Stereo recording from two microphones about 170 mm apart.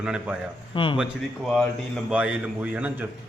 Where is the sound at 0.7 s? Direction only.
30° left (ahead or behind).